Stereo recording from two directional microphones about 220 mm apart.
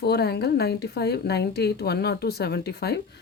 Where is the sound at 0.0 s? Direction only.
45° left (ahead or behind).